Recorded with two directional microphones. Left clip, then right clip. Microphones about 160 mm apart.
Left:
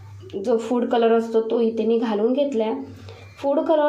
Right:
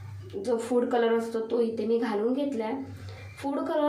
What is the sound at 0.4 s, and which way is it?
A woman's voice, 15° left (ahead or behind).